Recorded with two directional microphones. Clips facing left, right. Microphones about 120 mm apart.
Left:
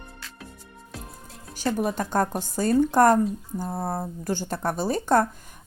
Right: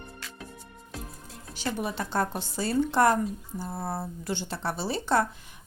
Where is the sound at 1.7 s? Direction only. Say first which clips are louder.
Left 4 dB; 45° left (ahead or behind).